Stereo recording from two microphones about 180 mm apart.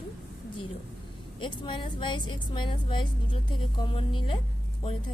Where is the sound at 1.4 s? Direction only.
25° left (ahead or behind).